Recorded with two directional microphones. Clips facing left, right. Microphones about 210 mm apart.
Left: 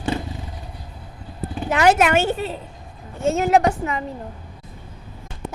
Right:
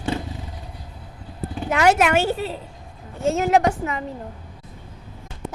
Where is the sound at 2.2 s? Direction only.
20° left (ahead or behind).